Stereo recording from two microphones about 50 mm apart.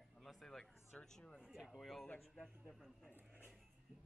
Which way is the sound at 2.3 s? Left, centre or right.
Centre.